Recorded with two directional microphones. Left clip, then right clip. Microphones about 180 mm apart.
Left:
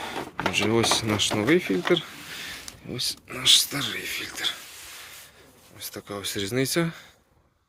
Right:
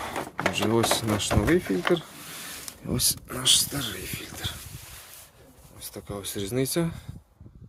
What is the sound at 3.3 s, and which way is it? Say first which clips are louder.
Speech: left 5 dB; 30° right (ahead or behind).